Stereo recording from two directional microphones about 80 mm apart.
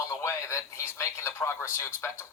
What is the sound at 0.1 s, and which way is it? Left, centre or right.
Speech, left.